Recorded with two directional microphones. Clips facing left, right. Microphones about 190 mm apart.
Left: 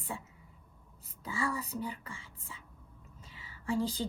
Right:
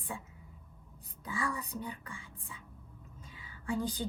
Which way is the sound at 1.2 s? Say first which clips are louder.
Left 2 dB; 30° left (ahead or behind).